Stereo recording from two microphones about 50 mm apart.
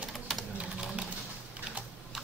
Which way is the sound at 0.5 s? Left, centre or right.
Right.